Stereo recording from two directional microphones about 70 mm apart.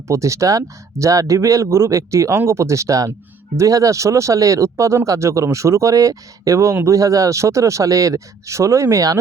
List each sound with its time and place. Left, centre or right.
0.1 s speech: right